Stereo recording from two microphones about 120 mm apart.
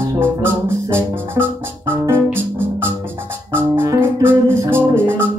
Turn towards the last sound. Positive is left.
turn(degrees=-20)  # may be behind; listen again after turning